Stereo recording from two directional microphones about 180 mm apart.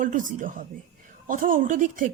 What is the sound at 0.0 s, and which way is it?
Speech, 45° right (ahead or behind).